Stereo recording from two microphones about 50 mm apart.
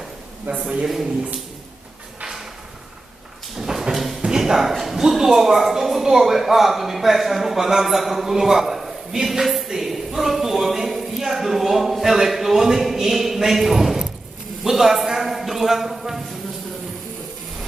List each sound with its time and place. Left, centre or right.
0.5 s a man's voice: right
3.5 s a sound: centre
4.7 s a man's voice: centre